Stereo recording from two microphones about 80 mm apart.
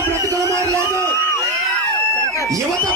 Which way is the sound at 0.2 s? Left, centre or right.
Right.